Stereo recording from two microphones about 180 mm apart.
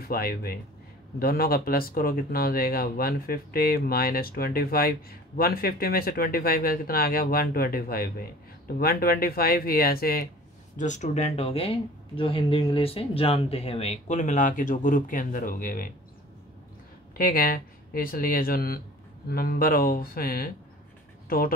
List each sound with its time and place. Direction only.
0.0 s speech: 55° left (ahead or behind)
10.8 s speech: 40° left (ahead or behind)
17.2 s speech: 55° left (ahead or behind)